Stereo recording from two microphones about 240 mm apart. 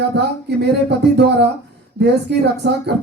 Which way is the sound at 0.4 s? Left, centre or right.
Right.